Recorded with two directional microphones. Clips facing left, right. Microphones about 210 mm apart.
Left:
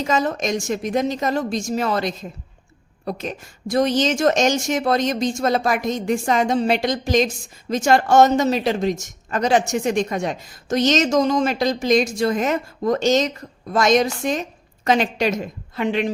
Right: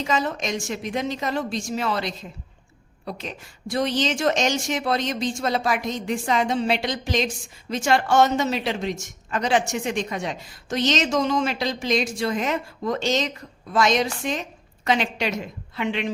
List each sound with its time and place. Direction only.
0.0 s a woman's voice: 45° left (ahead or behind)